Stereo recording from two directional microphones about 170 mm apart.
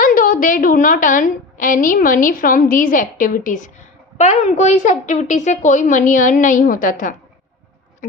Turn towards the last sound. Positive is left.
turn(degrees=50)  # may be behind; listen again after turning